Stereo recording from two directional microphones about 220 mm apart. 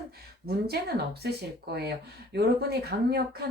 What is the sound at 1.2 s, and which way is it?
Speech, 45° right (ahead or behind).